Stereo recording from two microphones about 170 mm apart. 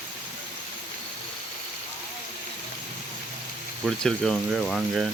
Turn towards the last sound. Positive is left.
turn(degrees=0)  # may be behind; listen again after turning